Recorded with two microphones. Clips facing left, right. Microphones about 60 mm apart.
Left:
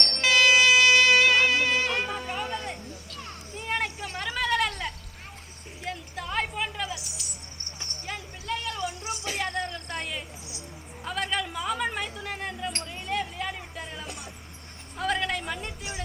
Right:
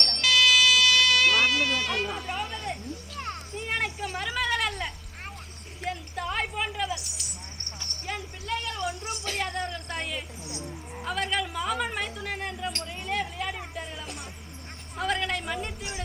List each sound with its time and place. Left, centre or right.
0.2 s music: left
2.0 s music: centre
3.5 s children playing: centre
5.8 s a sound: centre
13.7 s music: centre
14.9 s a sound: centre